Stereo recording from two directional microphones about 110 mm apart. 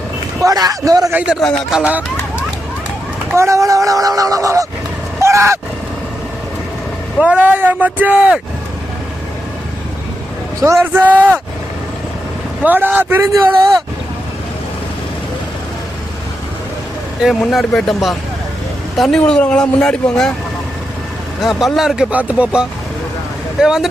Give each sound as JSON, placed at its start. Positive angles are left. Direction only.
{"t": 0.3, "sound": "speech", "side_deg": -35}
{"t": 1.1, "sound": "speech", "side_deg": -10}
{"t": 3.3, "sound": "speech", "side_deg": -25}
{"t": 5.2, "sound": "vehicle", "side_deg": -25}
{"t": 7.2, "sound": "speech", "side_deg": -10}
{"t": 10.6, "sound": "speech", "side_deg": -30}
{"t": 11.0, "sound": "speech", "side_deg": -15}
{"t": 12.6, "sound": "speech", "side_deg": -15}
{"t": 17.4, "sound": "speech", "side_deg": 5}
{"t": 21.4, "sound": "speech", "side_deg": -5}
{"t": 22.1, "sound": "speech", "side_deg": -15}